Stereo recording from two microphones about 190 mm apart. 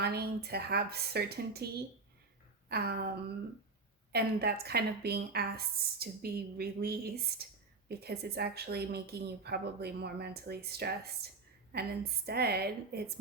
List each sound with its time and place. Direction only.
0.0 s speech: 55° right (ahead or behind)